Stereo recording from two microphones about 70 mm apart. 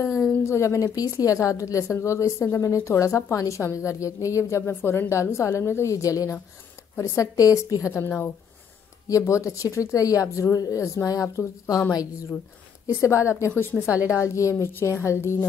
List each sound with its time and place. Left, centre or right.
0.0 s a sound: left
0.3 s a woman's voice: left
4.6 s a woman's voice: left
5.1 s a woman's voice: left
8.0 s a woman's voice: left
9.2 s a woman's voice: left
12.8 s a woman's voice: left
13.9 s a woman's voice: centre
14.2 s a woman's voice: left